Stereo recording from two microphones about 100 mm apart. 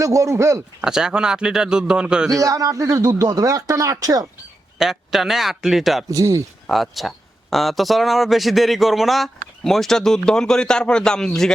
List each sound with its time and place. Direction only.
0.0 s speech: 35° right (ahead or behind)
0.8 s a man's voice: 5° right (ahead or behind)
2.4 s speech: 35° right (ahead or behind)
4.8 s a man's voice: 5° right (ahead or behind)
6.1 s speech: 35° right (ahead or behind)
6.7 s a man's voice: centre (ahead or behind)